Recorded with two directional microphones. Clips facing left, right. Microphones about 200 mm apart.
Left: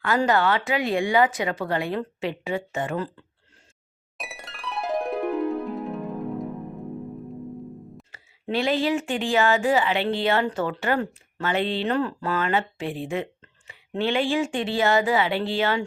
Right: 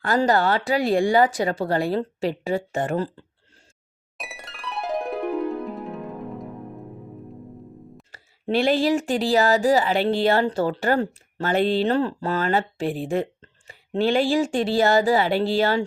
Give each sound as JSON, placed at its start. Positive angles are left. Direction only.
{"t": 0.0, "sound": "speech", "side_deg": -35}
{"t": 4.2, "sound": "music", "side_deg": 0}
{"t": 8.1, "sound": "speech", "side_deg": -35}